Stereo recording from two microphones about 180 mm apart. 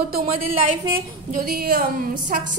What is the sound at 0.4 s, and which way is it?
A woman's voice, 50° right (ahead or behind).